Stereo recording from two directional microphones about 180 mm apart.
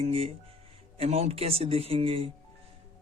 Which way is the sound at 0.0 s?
35° right (ahead or behind).